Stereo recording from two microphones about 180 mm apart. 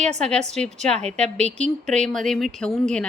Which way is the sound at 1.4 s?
40° right (ahead or behind).